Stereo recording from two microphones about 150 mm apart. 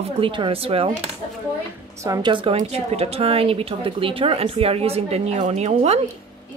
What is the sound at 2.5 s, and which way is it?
A woman's voice, 45° right (ahead or behind).